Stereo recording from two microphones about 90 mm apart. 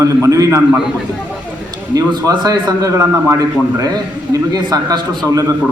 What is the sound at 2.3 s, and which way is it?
A man's voice, 50° right (ahead or behind).